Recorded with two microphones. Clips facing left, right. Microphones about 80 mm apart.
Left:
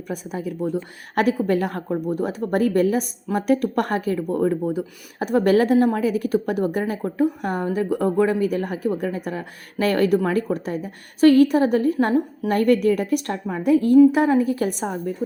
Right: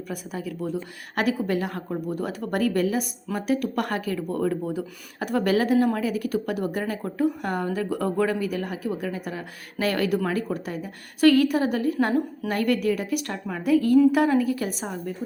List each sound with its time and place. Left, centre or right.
0.1 s a woman's voice: left
1.9 s speech: left
3.6 s speech: left
5.5 s a woman's voice: left
12.5 s a woman's voice: left